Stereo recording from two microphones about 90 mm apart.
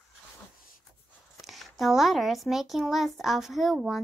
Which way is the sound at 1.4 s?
Centre (ahead or behind).